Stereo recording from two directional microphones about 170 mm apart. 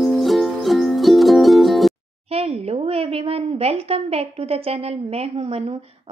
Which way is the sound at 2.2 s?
35° right (ahead or behind).